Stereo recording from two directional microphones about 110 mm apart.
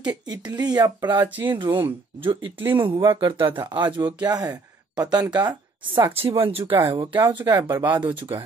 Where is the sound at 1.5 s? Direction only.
45° right (ahead or behind).